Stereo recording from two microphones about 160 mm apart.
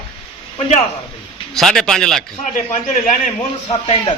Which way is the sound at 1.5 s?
Centre (ahead or behind).